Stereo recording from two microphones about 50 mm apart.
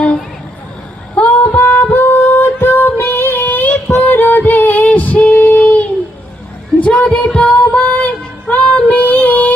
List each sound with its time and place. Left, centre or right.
1.1 s a sound: left
1.5 s music: left
1.9 s female singing: left
4.0 s music: left
7.7 s female singing: left